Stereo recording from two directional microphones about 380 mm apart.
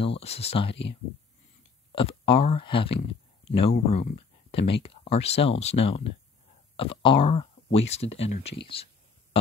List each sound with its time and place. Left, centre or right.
0.0 s speech: centre
1.9 s speech: centre